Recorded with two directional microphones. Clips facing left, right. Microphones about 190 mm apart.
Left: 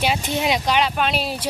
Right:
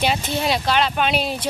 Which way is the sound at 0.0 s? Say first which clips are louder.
Even; 10° left (ahead or behind).